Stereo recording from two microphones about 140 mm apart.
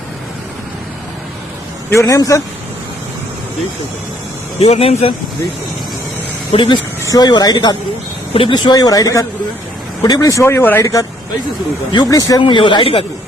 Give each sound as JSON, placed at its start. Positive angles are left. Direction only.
{"t": 1.9, "sound": "a man's voice", "side_deg": 20}
{"t": 4.6, "sound": "speech", "side_deg": 45}
{"t": 6.5, "sound": "a man's voice", "side_deg": 35}
{"t": 12.4, "sound": "speech", "side_deg": 35}